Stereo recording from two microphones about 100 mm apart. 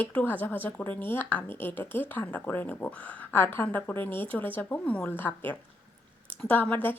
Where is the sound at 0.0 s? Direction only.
15° left (ahead or behind).